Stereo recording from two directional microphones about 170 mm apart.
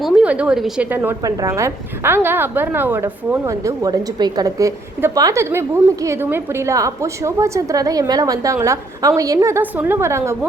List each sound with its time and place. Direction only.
0.0 s a woman's voice: 5° right (ahead or behind)